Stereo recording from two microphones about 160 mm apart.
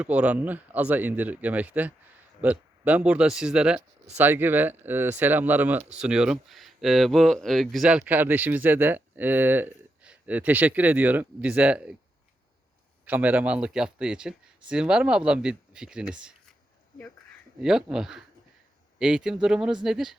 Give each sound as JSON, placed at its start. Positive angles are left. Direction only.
{"t": 0.0, "sound": "speech", "side_deg": -10}
{"t": 13.1, "sound": "speech", "side_deg": -10}
{"t": 17.6, "sound": "speech", "side_deg": -5}